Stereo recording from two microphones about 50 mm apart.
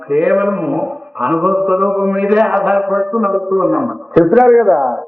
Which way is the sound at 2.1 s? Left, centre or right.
Right.